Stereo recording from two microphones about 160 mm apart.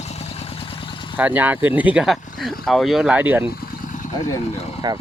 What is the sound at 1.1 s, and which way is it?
Speech, 10° right (ahead or behind).